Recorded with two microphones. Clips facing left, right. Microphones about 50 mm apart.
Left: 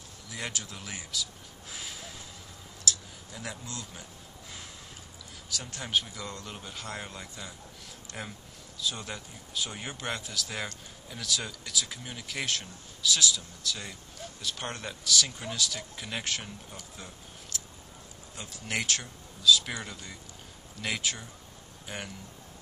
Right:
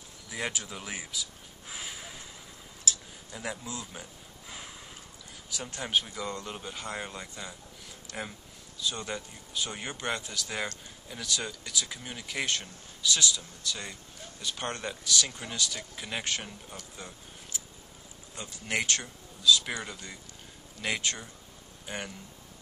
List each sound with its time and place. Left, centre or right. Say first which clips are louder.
0.3 s speech: right 3 dB; centre
1.7 s a sound: right 1 dB; centre
3.3 s speech: right 3 dB; centre
5.5 s speech: right 1 dB; centre
17.5 s a sound: left 1 dB; centre
18.3 s speech: right 2 dB; centre